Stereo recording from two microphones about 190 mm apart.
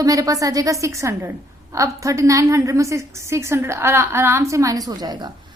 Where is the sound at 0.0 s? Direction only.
20° right (ahead or behind).